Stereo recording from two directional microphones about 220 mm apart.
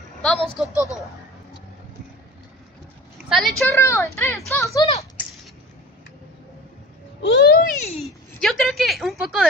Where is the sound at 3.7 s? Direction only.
10° left (ahead or behind).